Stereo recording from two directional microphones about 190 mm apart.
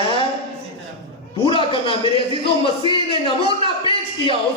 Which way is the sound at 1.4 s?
30° left (ahead or behind).